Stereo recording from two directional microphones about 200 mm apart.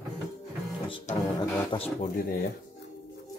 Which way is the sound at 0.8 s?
25° left (ahead or behind).